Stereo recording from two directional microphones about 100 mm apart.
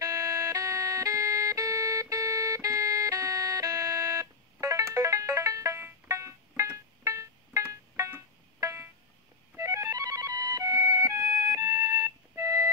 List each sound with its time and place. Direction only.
0.0 s music: 30° right (ahead or behind)